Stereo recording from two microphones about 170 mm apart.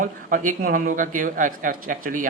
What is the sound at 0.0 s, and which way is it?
Speech, 55° right (ahead or behind).